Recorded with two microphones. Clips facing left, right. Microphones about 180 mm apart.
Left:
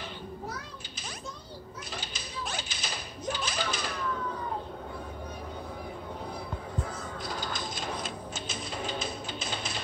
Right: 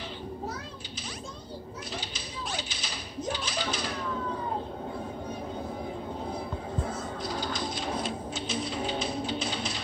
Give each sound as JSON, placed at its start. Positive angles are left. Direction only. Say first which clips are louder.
{"t": 2.0, "sound": "typewriter", "louder": "right 1 dB", "side_deg": 50}
{"t": 7.3, "sound": "printer", "louder": "right 4 dB", "side_deg": 45}
{"t": 8.4, "sound": "music", "louder": "right 5 dB", "side_deg": 45}